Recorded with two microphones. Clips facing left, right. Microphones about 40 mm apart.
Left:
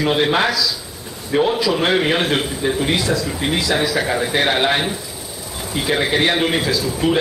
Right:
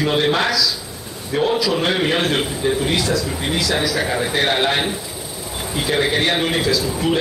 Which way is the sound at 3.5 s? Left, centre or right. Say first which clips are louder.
Left 1 dB; centre.